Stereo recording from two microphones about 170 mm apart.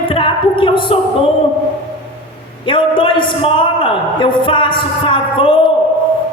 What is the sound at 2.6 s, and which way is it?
A man's voice, 30° left (ahead or behind).